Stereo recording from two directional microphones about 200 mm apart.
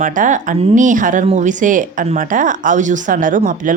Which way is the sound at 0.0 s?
40° right (ahead or behind).